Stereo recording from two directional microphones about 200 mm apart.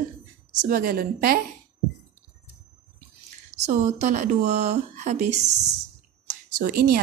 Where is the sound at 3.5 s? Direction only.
35° right (ahead or behind).